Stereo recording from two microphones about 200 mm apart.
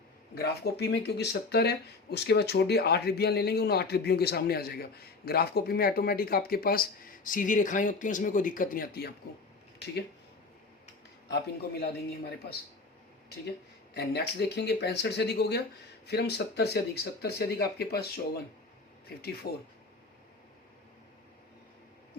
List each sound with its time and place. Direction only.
0.3 s speech: 55° left (ahead or behind)
11.3 s speech: 55° left (ahead or behind)
13.9 s speech: 55° left (ahead or behind)